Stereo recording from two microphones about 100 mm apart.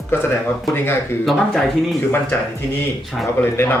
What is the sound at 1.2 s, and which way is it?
Speech, centre (ahead or behind).